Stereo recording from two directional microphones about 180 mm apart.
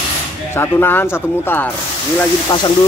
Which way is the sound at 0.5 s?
10° left (ahead or behind).